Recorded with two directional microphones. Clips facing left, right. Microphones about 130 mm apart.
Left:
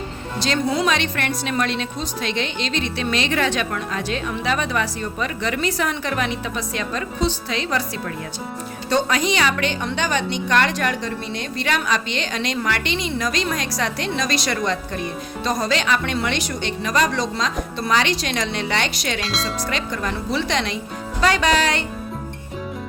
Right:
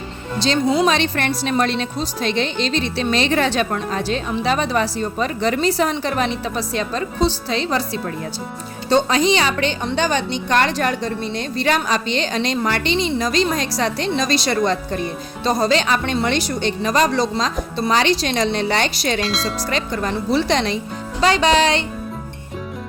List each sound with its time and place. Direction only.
0.3 s a woman's voice: 25° right (ahead or behind)
19.2 s speech: centre (ahead or behind)
19.7 s a woman's voice: 35° right (ahead or behind)
21.2 s music: 25° right (ahead or behind)